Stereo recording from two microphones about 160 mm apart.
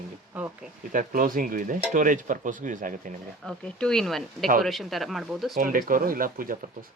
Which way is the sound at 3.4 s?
5° left (ahead or behind).